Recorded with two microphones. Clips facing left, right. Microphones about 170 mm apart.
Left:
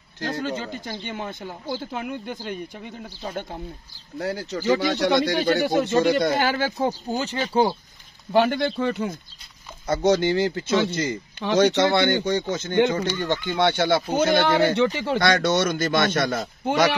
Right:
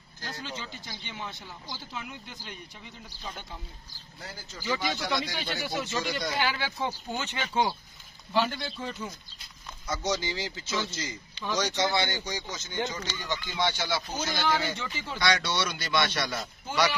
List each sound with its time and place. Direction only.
0.2 s speech: 55° left (ahead or behind)
4.2 s speech: 70° left (ahead or behind)
5.5 s speech: 55° left (ahead or behind); by 7.7 s 35° left (ahead or behind)
8.3 s speech: 55° left (ahead or behind)